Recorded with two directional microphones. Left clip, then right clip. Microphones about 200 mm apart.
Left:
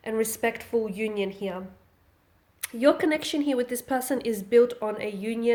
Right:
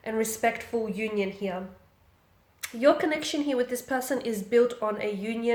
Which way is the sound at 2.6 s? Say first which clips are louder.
Even; 45° left (ahead or behind).